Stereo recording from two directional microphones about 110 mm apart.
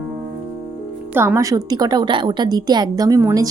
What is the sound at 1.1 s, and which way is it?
A woman's voice, 25° right (ahead or behind).